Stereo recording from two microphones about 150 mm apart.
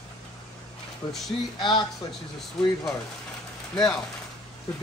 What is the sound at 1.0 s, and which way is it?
Speech, 30° left (ahead or behind).